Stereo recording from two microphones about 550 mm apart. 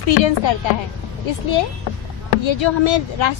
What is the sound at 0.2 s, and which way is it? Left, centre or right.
Speech, left.